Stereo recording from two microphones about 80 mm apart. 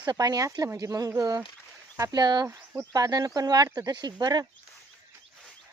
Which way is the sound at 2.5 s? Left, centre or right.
Right.